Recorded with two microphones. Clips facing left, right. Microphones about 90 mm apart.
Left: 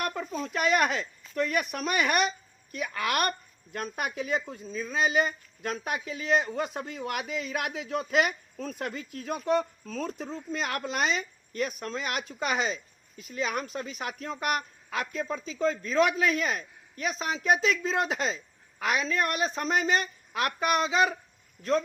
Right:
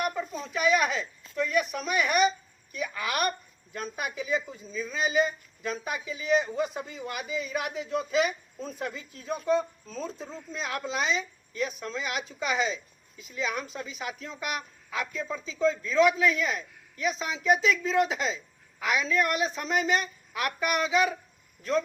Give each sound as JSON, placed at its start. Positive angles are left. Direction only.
{"t": 0.0, "sound": "speech", "side_deg": 60}